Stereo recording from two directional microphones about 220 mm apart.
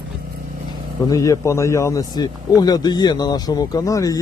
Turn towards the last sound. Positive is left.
turn(degrees=15)  # may be behind; listen again after turning